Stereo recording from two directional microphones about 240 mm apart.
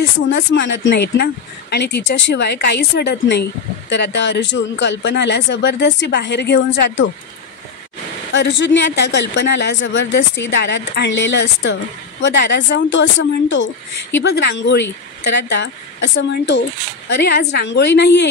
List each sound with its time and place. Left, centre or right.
0.3 s speech: left
8.3 s speech: left